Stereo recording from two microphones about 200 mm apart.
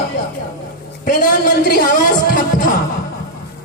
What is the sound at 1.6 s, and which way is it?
A man's voice, 50° left (ahead or behind).